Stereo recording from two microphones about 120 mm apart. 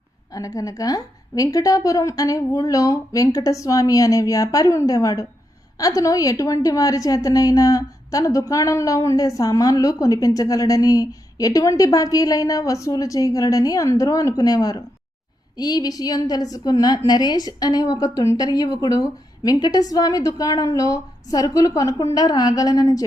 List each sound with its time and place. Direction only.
0.3 s a woman's voice: 30° left (ahead or behind)